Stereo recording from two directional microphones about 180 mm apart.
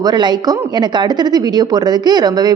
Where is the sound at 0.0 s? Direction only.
25° right (ahead or behind).